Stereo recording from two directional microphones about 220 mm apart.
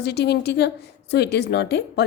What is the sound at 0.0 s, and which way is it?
A woman's voice, 50° left (ahead or behind).